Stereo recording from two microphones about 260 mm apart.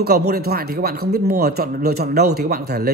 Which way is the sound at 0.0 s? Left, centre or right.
Right.